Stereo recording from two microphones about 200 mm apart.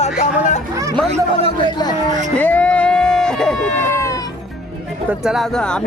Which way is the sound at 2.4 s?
5° left (ahead or behind).